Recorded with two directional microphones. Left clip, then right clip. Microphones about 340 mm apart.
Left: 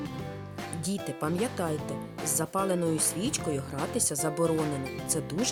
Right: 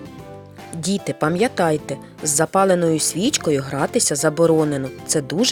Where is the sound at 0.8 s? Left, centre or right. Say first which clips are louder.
Right 13 dB; left.